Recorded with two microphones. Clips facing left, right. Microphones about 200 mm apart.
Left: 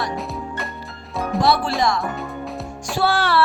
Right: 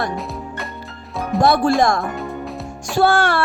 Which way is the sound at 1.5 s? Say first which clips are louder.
Right 5 dB; 45° right (ahead or behind).